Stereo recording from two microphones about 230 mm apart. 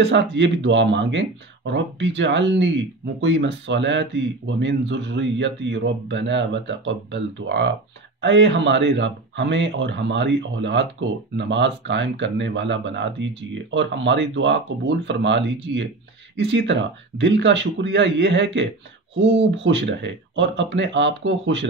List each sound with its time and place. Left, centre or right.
0.0 s speech: right